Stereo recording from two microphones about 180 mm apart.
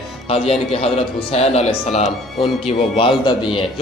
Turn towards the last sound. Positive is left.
turn(degrees=25)  # may be behind; listen again after turning